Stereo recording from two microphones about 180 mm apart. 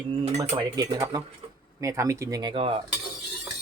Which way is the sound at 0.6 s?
20° right (ahead or behind).